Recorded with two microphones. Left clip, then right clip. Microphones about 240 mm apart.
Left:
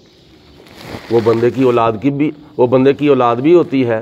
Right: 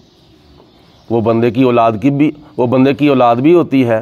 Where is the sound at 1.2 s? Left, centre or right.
Right.